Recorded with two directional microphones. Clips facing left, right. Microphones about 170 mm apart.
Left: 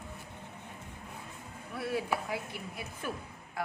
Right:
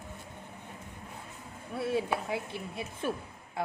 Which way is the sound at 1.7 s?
25° right (ahead or behind).